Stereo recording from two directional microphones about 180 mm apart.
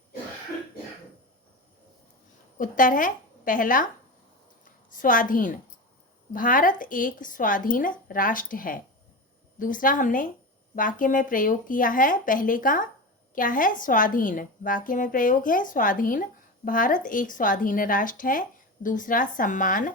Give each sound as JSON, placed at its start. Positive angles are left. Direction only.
{"t": 2.6, "sound": "a woman's voice", "side_deg": 50}